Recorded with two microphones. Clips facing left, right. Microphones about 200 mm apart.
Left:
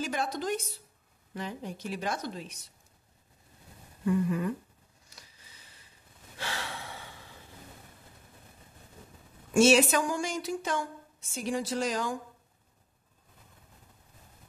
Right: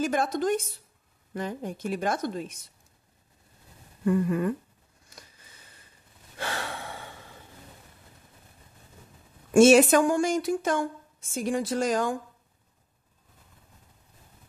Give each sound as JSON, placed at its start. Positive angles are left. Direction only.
{"t": 0.0, "sound": "a woman's voice", "side_deg": -50}
{"t": 4.0, "sound": "a woman's voice", "side_deg": -55}
{"t": 6.3, "sound": "gasp", "side_deg": -50}
{"t": 9.5, "sound": "a woman's voice", "side_deg": -50}